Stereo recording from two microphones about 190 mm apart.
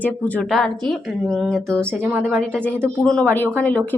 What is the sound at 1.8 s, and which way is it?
A woman's voice, 10° right (ahead or behind).